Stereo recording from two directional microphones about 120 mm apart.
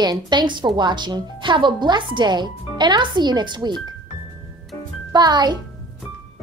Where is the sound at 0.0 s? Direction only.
35° right (ahead or behind).